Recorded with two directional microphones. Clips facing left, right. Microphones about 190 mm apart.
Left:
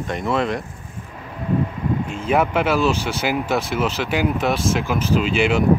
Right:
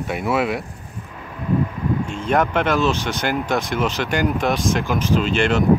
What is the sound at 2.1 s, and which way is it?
Speech, 5° left (ahead or behind).